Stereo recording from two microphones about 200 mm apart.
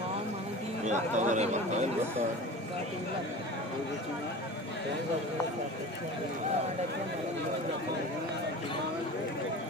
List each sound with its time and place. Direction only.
0.9 s speech: 35° right (ahead or behind)